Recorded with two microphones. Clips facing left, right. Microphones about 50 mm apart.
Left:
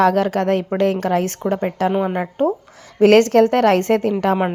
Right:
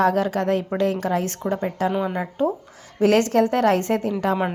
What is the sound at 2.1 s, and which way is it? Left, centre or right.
A woman's voice, left.